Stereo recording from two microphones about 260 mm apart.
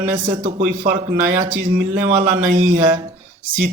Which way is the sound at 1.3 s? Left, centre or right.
Right.